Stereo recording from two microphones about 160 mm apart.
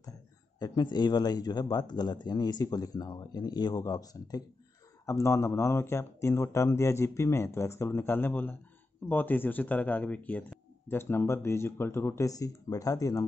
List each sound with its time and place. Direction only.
0.6 s speech: 25° left (ahead or behind)